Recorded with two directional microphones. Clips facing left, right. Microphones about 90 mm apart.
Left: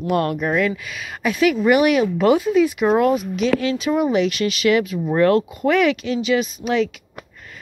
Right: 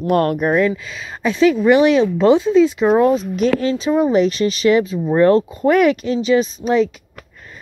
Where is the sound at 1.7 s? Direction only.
25° right (ahead or behind).